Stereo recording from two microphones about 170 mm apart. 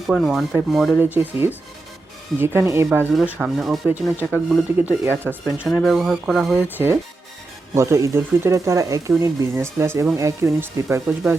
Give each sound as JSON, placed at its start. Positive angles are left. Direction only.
{"t": 0.1, "sound": "speech", "side_deg": 0}
{"t": 0.9, "sound": "speech", "side_deg": -10}